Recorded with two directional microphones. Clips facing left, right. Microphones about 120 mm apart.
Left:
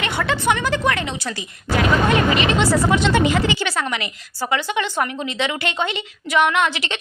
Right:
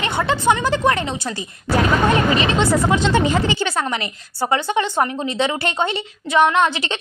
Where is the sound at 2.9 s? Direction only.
30° right (ahead or behind).